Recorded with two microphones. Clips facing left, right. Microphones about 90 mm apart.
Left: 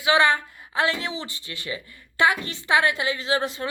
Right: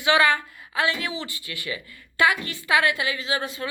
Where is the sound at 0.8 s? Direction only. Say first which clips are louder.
Left 1 dB; 35° left (ahead or behind).